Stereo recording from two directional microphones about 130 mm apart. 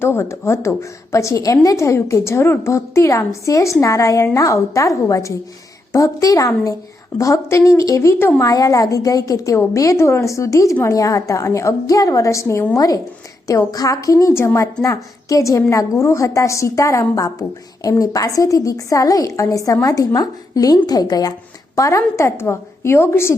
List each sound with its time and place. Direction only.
0.0 s a woman's voice: 20° left (ahead or behind)